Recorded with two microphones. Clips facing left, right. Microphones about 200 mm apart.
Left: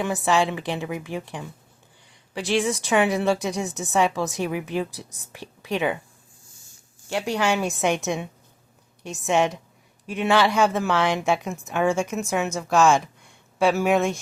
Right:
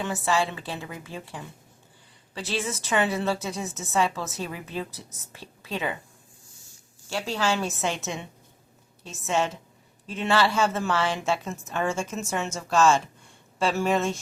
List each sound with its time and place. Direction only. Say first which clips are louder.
0.0 s a woman's voice: left 4 dB; 15° left (ahead or behind)
7.1 s a woman's voice: left 3 dB; 15° left (ahead or behind)